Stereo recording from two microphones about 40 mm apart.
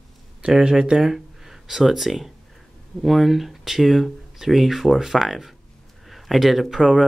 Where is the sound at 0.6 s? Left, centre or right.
Centre.